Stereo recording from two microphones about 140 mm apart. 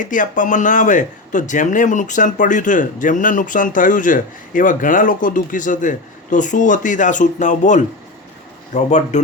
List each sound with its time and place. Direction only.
0.0 s speech: 65° left (ahead or behind)